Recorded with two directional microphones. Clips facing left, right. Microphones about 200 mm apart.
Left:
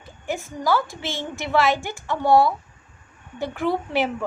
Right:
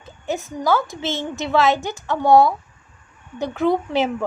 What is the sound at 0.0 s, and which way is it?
A woman's voice, 20° right (ahead or behind).